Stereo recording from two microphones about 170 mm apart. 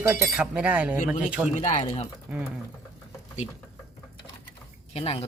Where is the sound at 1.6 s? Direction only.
40° left (ahead or behind).